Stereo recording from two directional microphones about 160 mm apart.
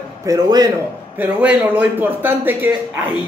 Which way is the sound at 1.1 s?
10° right (ahead or behind).